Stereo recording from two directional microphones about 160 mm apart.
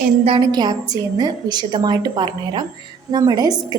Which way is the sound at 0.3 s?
30° right (ahead or behind).